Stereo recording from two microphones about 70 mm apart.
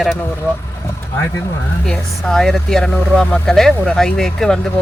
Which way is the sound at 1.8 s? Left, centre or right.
Centre.